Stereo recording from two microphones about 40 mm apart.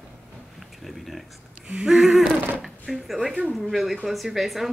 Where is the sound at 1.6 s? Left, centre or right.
Centre.